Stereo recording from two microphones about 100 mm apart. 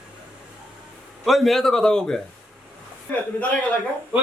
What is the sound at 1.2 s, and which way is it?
Speech, centre (ahead or behind).